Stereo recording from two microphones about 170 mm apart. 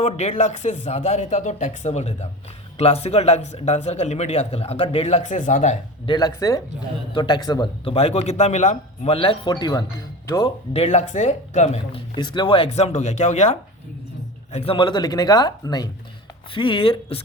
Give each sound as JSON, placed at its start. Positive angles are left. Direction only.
{"t": 0.0, "sound": "a man's voice", "side_deg": 40}
{"t": 6.1, "sound": "a man's voice", "side_deg": 20}
{"t": 10.8, "sound": "a man's voice", "side_deg": 40}